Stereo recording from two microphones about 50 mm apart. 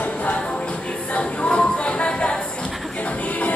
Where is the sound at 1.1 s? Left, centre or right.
Left.